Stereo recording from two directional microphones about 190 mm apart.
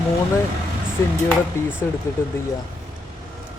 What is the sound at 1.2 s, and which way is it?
Speech, 5° right (ahead or behind).